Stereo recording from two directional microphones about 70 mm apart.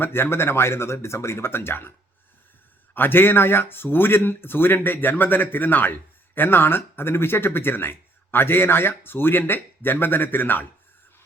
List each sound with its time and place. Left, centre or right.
0.0 s speech: left
2.9 s speech: left